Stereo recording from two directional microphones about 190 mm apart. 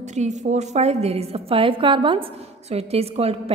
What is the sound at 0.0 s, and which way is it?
A woman's voice, 40° right (ahead or behind).